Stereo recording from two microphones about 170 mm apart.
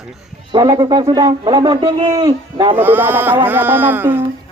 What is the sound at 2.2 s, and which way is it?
Speech, 25° right (ahead or behind).